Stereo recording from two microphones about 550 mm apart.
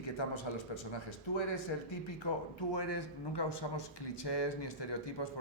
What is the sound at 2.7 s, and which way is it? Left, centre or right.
A man's voice, left.